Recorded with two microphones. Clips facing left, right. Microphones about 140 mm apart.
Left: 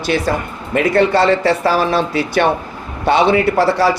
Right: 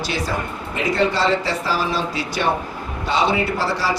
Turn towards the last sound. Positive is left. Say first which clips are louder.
# left 8 dB
turn(degrees=60)  # may be behind; listen again after turning